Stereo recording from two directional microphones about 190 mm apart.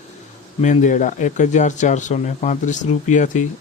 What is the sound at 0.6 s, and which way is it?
Speech, 40° left (ahead or behind).